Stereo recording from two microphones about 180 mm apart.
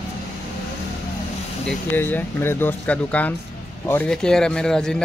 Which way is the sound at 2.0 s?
10° left (ahead or behind).